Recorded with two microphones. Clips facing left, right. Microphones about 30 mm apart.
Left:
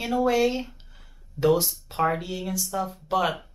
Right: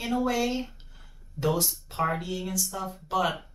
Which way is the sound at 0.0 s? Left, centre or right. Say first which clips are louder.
Left 5 dB; centre.